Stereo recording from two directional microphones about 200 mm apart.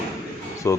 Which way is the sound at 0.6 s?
15° left (ahead or behind).